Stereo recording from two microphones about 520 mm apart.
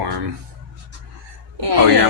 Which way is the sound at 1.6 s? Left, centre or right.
Right.